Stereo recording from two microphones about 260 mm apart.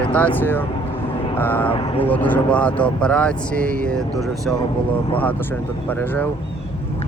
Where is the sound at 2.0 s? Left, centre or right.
Centre.